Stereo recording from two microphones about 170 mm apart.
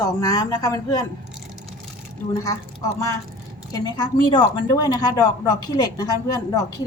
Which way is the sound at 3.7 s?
25° left (ahead or behind).